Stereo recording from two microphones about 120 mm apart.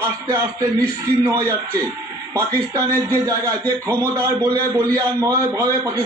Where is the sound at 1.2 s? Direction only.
25° right (ahead or behind).